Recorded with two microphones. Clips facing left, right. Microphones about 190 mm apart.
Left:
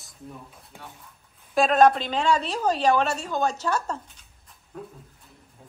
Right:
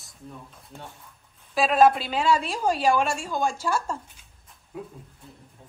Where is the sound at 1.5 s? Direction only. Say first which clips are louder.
Left 1 dB; 5° right (ahead or behind).